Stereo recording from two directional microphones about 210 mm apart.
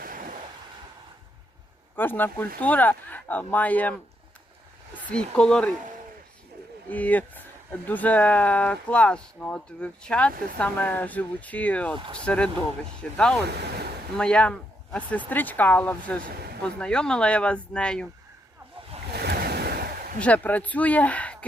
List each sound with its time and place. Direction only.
0.0 s waves: 40° right (ahead or behind)
2.0 s speech: 10° left (ahead or behind)
5.1 s speech: 5° left (ahead or behind)
6.9 s speech: 5° left (ahead or behind)
11.9 s speech: 25° right (ahead or behind)
12.2 s speech: 5° left (ahead or behind)
13.4 s speech: 50° right (ahead or behind)
14.2 s speech: 5° left (ahead or behind)
16.2 s speech: 45° right (ahead or behind)
16.8 s speech: 5° left (ahead or behind)
19.1 s waves: 50° right (ahead or behind)
20.1 s speech: 5° left (ahead or behind)